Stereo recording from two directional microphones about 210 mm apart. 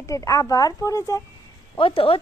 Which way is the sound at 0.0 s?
15° left (ahead or behind).